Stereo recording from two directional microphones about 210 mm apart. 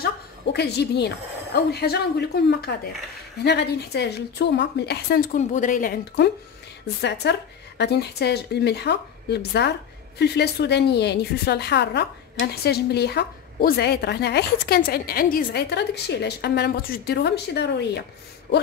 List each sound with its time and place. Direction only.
0.0 s a woman's voice: 50° left (ahead or behind)